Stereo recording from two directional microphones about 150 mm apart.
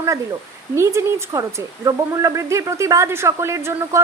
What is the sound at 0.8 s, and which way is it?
A woman's voice, 20° right (ahead or behind).